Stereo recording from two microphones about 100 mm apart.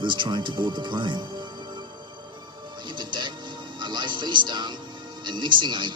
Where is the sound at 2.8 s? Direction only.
50° right (ahead or behind).